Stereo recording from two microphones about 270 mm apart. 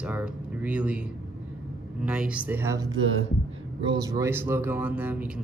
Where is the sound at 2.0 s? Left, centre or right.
Centre.